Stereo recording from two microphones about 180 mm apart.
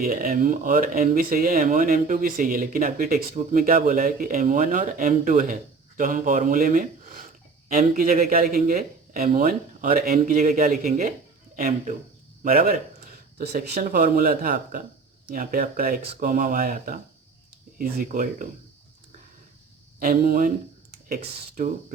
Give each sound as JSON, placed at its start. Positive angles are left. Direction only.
{"t": 0.0, "sound": "speech", "side_deg": -55}
{"t": 20.0, "sound": "speech", "side_deg": -50}